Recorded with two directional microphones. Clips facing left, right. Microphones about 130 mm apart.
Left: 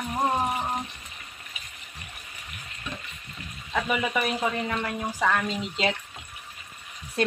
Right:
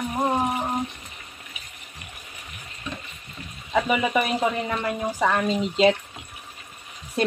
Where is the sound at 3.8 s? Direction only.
15° right (ahead or behind).